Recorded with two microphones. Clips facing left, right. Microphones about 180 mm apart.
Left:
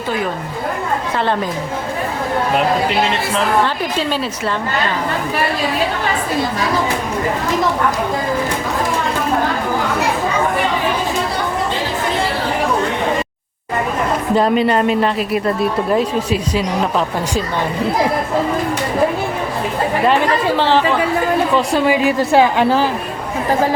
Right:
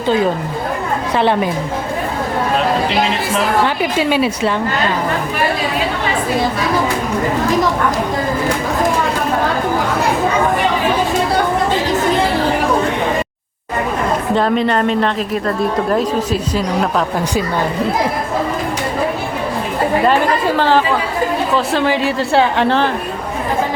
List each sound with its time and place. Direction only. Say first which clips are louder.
1.2 s a woman's voice: right 5 dB; 15° right (ahead or behind)
3.9 s a woman's voice: right 5 dB; 10° right (ahead or behind)
14.3 s speech: left 2 dB; 5° left (ahead or behind)
21.5 s a woman's voice: left 1 dB; centre (ahead or behind)
22.2 s speech: left 1 dB; 20° left (ahead or behind)
22.5 s a woman's voice: even; 5° left (ahead or behind)